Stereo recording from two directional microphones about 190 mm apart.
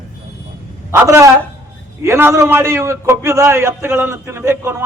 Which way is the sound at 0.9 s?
15° right (ahead or behind).